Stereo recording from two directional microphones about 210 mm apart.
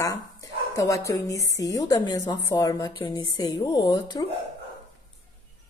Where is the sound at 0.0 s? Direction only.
15° left (ahead or behind).